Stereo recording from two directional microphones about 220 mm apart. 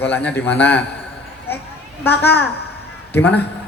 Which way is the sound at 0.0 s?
5° left (ahead or behind).